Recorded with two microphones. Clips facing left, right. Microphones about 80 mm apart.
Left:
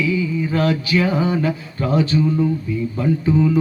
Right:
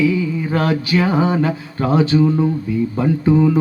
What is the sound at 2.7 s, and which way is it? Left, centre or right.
Speech, right.